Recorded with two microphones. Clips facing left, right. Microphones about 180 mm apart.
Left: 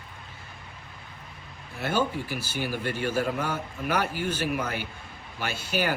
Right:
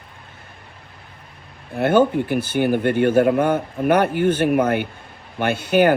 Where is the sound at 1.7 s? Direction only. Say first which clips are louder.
Right 11 dB; 55° right (ahead or behind).